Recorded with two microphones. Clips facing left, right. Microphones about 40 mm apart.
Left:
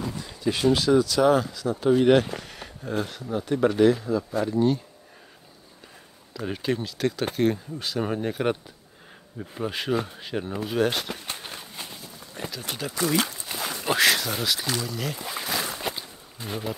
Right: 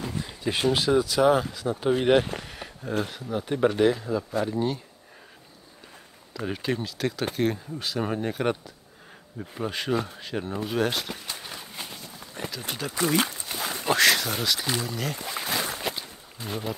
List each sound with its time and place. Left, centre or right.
0.0 s a sound: right
0.7 s speech: centre
1.5 s speech: right
2.0 s speech: centre
3.3 s speech: centre
6.3 s speech: centre
11.2 s a sound: left
11.6 s walk: centre
13.0 s speech: centre
13.5 s a sound: centre
13.8 s speech: centre
14.7 s speech: centre
15.0 s speech: centre
15.8 s a sound: centre